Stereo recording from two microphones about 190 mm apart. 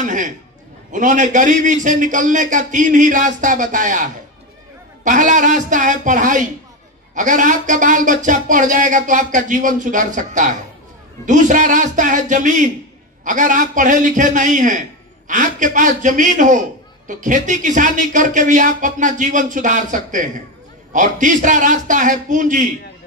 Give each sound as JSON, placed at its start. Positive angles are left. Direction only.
{"t": 0.0, "sound": "a man's voice", "side_deg": -40}